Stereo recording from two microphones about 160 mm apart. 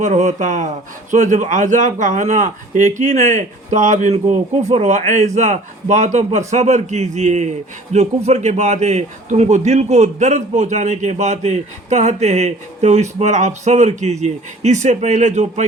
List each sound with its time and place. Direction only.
0.0 s a man's voice: 45° right (ahead or behind)